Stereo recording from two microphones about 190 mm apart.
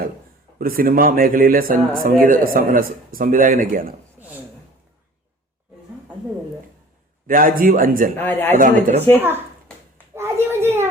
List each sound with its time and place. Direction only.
0.6 s speech: 50° right (ahead or behind)
7.3 s speech: 45° right (ahead or behind)
8.2 s speech: 10° left (ahead or behind)
8.5 s speech: 45° right (ahead or behind)
10.0 s a sound: 15° right (ahead or behind)